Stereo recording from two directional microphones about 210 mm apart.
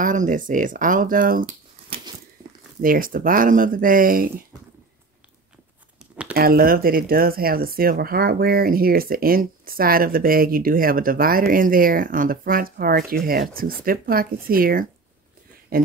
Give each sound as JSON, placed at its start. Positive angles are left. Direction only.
{"t": 0.0, "sound": "speech", "side_deg": -40}
{"t": 2.8, "sound": "speech", "side_deg": -40}
{"t": 6.3, "sound": "speech", "side_deg": -45}